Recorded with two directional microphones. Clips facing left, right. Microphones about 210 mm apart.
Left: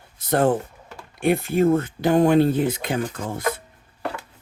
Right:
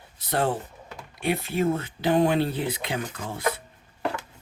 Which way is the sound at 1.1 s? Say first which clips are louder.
Left 6 dB; 50° left (ahead or behind).